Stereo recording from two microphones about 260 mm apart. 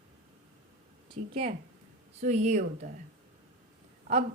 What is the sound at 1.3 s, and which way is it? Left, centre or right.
A woman's voice, right.